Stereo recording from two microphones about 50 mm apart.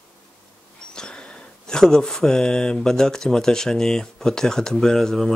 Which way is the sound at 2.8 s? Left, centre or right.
Centre.